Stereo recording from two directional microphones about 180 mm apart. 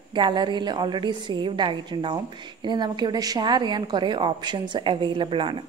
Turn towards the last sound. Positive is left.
turn(degrees=-30)  # may be behind; listen again after turning